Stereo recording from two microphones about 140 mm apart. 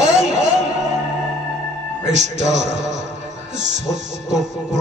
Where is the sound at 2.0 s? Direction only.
55° right (ahead or behind).